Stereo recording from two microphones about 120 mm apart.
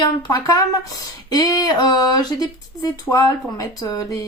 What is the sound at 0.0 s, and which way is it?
Speech, 35° left (ahead or behind).